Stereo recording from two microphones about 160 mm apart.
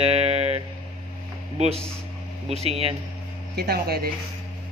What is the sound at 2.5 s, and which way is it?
Speech, 40° right (ahead or behind).